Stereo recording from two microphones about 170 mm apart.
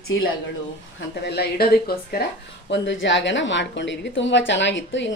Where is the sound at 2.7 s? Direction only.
90° left.